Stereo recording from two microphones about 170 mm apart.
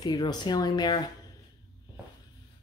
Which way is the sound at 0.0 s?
25° left (ahead or behind).